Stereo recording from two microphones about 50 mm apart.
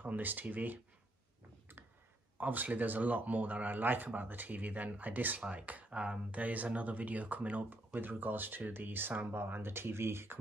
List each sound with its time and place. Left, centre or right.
0.0 s speech: right
2.3 s speech: right